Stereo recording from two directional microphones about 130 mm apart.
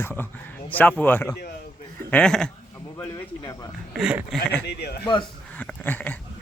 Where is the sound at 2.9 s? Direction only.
25° left (ahead or behind).